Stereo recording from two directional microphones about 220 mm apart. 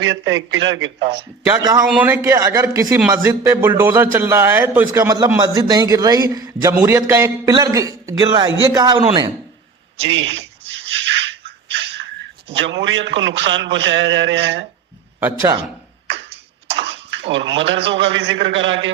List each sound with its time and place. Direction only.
0.0 s a man's voice: 55° right (ahead or behind)
1.5 s a man's voice: 15° right (ahead or behind)
1.8 s a man's voice: 5° right (ahead or behind)
10.0 s a man's voice: 60° right (ahead or behind)
10.9 s a sound: 55° right (ahead or behind)
12.5 s a man's voice: 55° right (ahead or behind)
15.2 s a man's voice: 15° right (ahead or behind)
16.6 s a sound: 55° right (ahead or behind)
17.8 s a man's voice: 55° right (ahead or behind)